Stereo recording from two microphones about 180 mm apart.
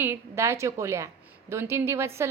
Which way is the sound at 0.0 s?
15° right (ahead or behind).